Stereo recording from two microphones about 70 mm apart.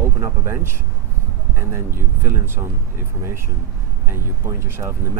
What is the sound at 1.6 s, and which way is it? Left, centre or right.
Speech, right.